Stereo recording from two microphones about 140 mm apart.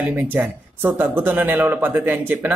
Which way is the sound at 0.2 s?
15° right (ahead or behind).